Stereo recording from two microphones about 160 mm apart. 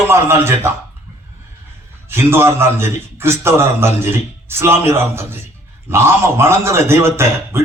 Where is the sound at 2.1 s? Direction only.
15° right (ahead or behind).